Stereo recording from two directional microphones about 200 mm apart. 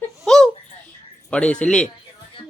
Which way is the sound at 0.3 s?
Centre (ahead or behind).